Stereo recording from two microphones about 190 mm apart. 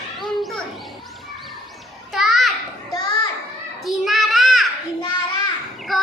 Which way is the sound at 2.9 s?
20° left (ahead or behind).